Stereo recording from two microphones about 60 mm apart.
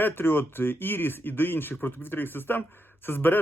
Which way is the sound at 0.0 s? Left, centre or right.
Left.